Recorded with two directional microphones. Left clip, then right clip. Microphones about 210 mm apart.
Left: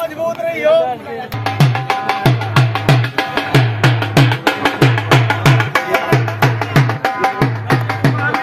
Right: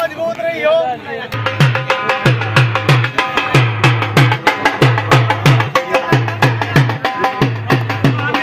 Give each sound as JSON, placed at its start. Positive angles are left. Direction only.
{"t": 1.6, "sound": "music", "side_deg": 50}
{"t": 5.9, "sound": "music", "side_deg": 0}